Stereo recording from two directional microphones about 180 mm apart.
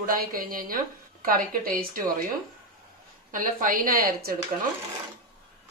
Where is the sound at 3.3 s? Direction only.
50° right (ahead or behind).